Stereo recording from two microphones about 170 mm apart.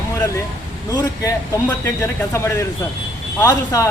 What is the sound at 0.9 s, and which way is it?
Speech, 20° left (ahead or behind).